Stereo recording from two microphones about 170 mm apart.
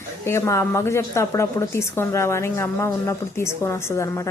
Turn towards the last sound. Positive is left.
turn(degrees=20)  # may be behind; listen again after turning